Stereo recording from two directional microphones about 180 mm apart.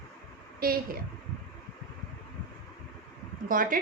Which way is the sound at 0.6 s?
55° right (ahead or behind).